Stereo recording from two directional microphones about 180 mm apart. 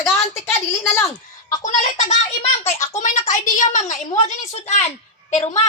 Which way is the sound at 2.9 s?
40° left (ahead or behind).